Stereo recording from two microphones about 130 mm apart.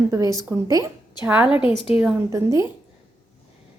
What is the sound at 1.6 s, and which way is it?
Speech, 45° left (ahead or behind).